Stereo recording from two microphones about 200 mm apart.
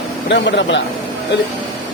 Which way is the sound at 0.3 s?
65° left (ahead or behind).